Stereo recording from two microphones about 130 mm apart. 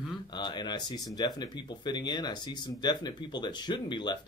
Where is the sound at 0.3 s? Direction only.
35° left (ahead or behind).